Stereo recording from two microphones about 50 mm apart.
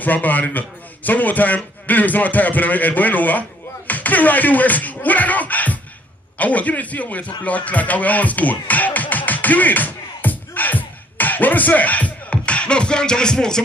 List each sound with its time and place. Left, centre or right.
0.0 s a man's voice: left; by 13.6 s centre